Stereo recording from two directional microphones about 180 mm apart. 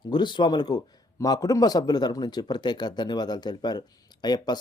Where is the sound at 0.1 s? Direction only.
25° left (ahead or behind).